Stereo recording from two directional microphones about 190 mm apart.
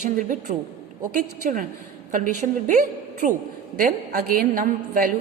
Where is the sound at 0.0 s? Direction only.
45° right (ahead or behind).